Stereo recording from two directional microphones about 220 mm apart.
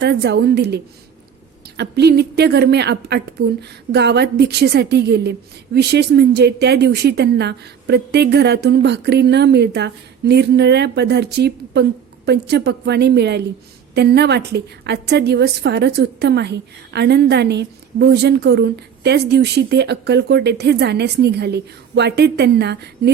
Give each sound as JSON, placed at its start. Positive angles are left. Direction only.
{"t": 0.0, "sound": "a woman's voice", "side_deg": -50}